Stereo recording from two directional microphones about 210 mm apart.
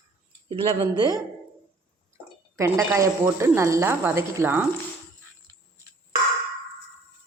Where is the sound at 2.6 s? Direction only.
15° right (ahead or behind).